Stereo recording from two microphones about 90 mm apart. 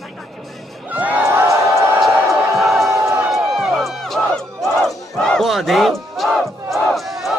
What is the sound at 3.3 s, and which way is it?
Music, centre (ahead or behind).